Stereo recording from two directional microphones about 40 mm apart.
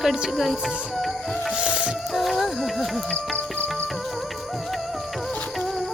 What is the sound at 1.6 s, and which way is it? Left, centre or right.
Music, right.